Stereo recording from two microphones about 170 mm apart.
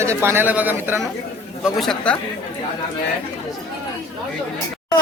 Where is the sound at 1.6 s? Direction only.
Centre (ahead or behind).